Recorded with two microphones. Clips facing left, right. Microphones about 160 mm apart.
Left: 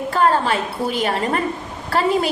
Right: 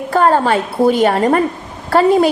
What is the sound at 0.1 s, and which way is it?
A woman's voice, 45° right (ahead or behind).